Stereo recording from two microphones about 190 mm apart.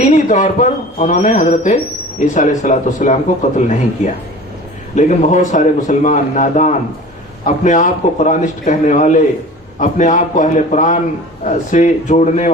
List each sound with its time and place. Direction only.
0.0 s a man's voice: 40° left (ahead or behind)